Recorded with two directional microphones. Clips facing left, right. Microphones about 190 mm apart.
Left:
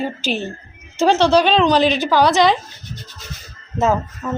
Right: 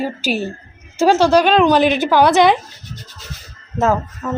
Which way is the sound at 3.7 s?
Centre (ahead or behind).